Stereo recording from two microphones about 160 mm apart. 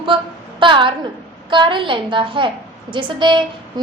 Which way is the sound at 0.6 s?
30° right (ahead or behind).